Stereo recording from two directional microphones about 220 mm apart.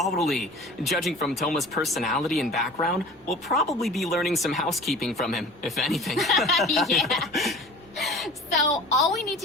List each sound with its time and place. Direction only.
0.0 s speech: centre (ahead or behind)
7.9 s gasp: centre (ahead or behind)
8.7 s speech: centre (ahead or behind)